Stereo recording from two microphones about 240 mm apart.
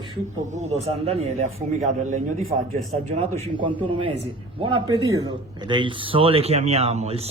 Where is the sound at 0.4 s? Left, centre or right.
Right.